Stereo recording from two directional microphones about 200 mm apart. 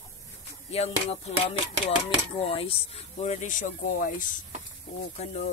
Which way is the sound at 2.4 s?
30° left (ahead or behind).